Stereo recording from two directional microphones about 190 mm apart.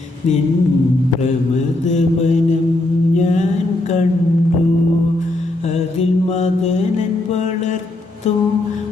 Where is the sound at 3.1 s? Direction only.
40° left (ahead or behind).